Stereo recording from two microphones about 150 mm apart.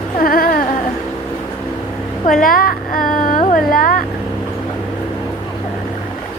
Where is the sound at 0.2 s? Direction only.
75° left (ahead or behind).